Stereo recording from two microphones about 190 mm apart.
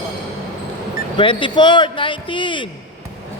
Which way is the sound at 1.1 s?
25° left (ahead or behind).